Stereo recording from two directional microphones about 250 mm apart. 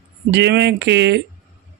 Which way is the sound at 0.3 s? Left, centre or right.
Right.